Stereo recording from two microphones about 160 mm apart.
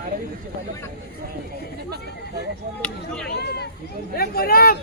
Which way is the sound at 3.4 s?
90° left.